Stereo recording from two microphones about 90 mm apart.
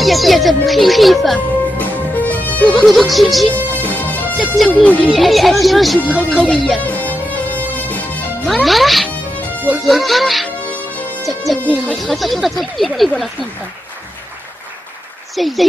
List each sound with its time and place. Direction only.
0.0 s a child's voice: centre (ahead or behind)
1.8 s music: 20° left (ahead or behind)
2.7 s a child's voice: centre (ahead or behind)
3.5 s music: 20° left (ahead or behind)
4.4 s a child's voice: centre (ahead or behind)
6.8 s music: 20° left (ahead or behind)
8.5 s a child's voice: centre (ahead or behind)
15.3 s speech: centre (ahead or behind)